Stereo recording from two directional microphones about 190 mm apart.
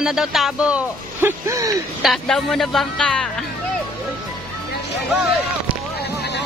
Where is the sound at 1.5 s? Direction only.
15° right (ahead or behind).